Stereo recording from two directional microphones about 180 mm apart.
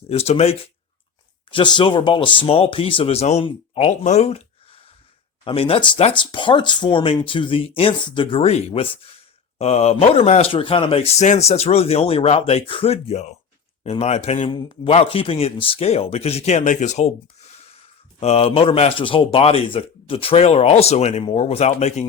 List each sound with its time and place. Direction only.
0.1 s a man's voice: 35° left (ahead or behind)
1.5 s a man's voice: 25° left (ahead or behind)